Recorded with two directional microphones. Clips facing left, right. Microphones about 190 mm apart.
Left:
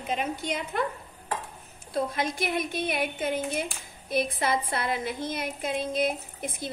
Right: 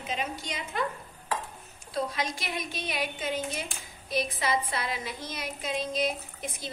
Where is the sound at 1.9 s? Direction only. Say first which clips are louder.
Left 3 dB; 55° left (ahead or behind).